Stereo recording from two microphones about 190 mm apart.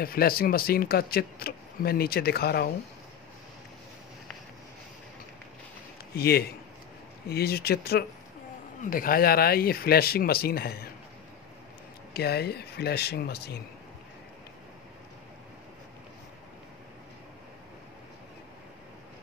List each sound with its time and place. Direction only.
0.0 s speech: 50° left (ahead or behind)
6.1 s speech: 55° left (ahead or behind)
12.1 s speech: 55° left (ahead or behind)